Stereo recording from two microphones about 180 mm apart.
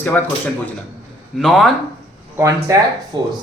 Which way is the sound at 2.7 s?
20° right (ahead or behind).